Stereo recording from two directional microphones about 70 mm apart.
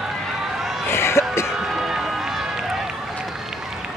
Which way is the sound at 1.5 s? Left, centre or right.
Centre.